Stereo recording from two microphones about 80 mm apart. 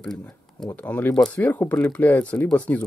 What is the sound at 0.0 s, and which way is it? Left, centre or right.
Speech, centre.